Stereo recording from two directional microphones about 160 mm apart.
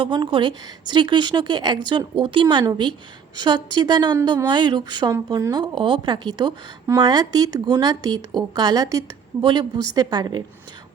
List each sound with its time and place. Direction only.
0.0 s a woman's voice: 30° right (ahead or behind)